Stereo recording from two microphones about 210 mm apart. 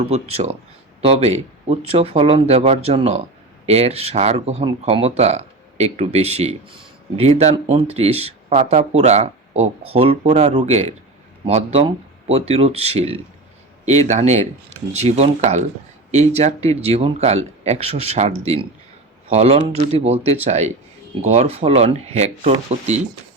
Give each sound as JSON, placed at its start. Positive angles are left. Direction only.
{"t": 0.0, "sound": "speech", "side_deg": -30}